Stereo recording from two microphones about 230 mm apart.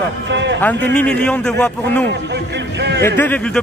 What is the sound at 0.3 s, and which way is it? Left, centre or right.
Speech, right.